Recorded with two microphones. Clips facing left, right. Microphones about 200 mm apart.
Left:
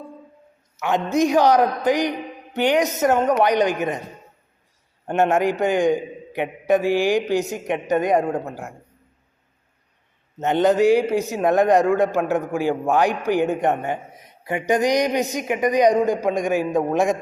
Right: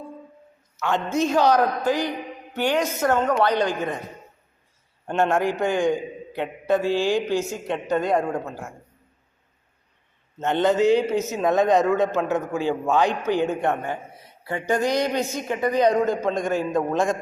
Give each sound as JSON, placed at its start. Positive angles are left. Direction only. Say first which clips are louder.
{"t": 0.8, "sound": "a man's voice", "louder": "left 3 dB", "side_deg": 15}
{"t": 5.0, "sound": "a man's voice", "louder": "left 3 dB", "side_deg": 15}
{"t": 10.3, "sound": "a man's voice", "louder": "left 3 dB", "side_deg": 15}